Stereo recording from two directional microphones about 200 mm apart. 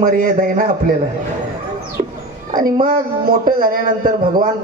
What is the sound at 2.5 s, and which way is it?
Speech, 45° right (ahead or behind).